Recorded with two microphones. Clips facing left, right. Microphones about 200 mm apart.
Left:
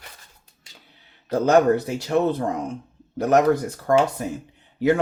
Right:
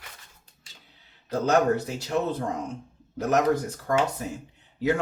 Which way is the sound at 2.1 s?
65° left (ahead or behind).